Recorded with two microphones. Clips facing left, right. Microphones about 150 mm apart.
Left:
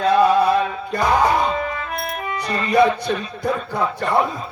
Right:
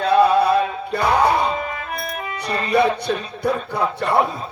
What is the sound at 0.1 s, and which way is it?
Music, 30° right (ahead or behind).